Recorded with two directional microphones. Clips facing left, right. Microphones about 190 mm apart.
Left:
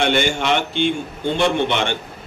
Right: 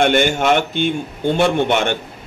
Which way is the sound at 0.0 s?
50° right (ahead or behind).